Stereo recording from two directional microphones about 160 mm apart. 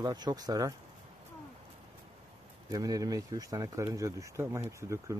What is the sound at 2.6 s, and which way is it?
Speech, 20° right (ahead or behind).